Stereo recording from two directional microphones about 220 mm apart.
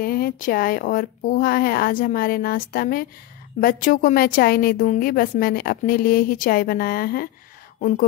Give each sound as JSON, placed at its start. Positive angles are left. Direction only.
{"t": 0.0, "sound": "a woman's voice", "side_deg": 40}